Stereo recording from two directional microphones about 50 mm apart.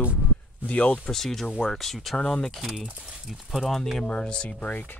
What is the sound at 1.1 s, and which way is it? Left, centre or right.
Speech, centre.